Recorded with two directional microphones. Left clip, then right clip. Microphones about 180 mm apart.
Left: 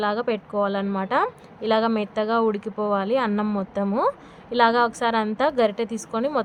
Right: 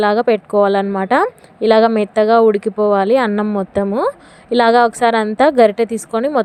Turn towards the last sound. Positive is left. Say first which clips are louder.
# right 9 dB
turn(degrees=-35)  # may be behind; listen again after turning